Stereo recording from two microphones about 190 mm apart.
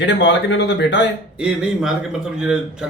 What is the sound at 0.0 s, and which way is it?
Speech, 70° left (ahead or behind).